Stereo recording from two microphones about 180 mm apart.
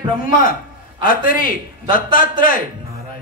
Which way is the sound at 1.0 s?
50° left (ahead or behind).